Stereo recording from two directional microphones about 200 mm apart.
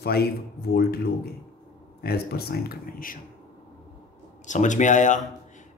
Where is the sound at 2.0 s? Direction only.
50° left (ahead or behind).